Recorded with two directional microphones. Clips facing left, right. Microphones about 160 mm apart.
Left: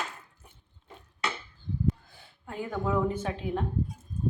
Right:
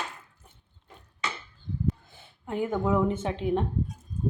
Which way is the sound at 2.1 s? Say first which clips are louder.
Right 7 dB; 20° right (ahead or behind).